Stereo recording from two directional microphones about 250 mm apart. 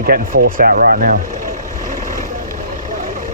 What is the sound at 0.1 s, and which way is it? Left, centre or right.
Speech, right.